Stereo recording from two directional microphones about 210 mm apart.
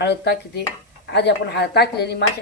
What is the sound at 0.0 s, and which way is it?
Speech, 50° left (ahead or behind).